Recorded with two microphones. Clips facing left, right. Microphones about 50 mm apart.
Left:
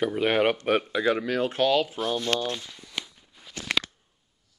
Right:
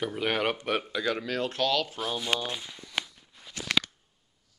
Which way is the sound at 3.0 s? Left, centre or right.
Centre.